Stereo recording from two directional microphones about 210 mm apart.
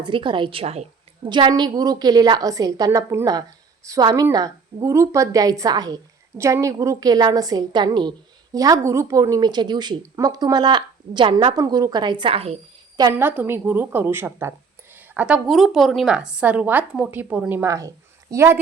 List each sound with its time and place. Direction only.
0.0 s a woman's voice: 20° right (ahead or behind)
13.0 s a woman's voice: 15° right (ahead or behind)